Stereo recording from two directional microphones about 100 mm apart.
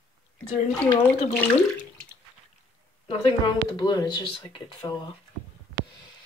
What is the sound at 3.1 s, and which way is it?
Speech, 50° left (ahead or behind).